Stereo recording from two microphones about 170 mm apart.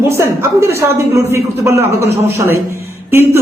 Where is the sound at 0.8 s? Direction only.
15° right (ahead or behind).